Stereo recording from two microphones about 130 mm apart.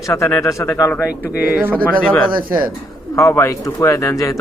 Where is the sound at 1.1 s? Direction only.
15° right (ahead or behind).